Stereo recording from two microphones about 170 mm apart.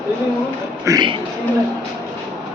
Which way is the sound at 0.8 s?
20° right (ahead or behind).